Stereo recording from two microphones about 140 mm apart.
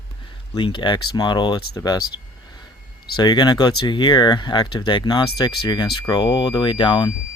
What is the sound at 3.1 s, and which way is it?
Speech, 30° left (ahead or behind).